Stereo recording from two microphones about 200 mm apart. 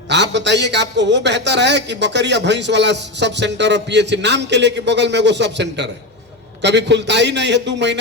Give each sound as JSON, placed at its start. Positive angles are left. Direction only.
{"t": 0.1, "sound": "a man's voice", "side_deg": -60}